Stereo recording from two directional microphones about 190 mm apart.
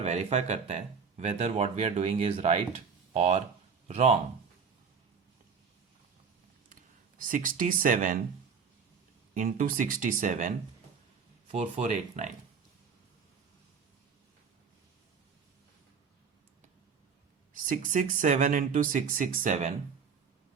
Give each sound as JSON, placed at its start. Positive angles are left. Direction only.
{"t": 0.0, "sound": "speech", "side_deg": -35}
{"t": 7.2, "sound": "speech", "side_deg": -45}
{"t": 9.3, "sound": "speech", "side_deg": -45}
{"t": 17.7, "sound": "speech", "side_deg": -40}